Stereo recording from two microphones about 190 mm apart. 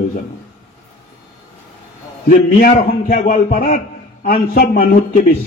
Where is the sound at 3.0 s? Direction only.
40° left (ahead or behind).